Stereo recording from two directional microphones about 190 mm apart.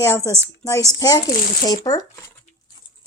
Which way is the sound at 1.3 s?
50° left (ahead or behind).